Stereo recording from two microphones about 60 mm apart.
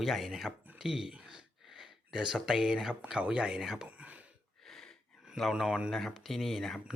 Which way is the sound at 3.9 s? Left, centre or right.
Right.